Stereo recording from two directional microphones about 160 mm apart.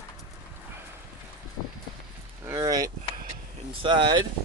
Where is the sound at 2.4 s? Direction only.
20° right (ahead or behind).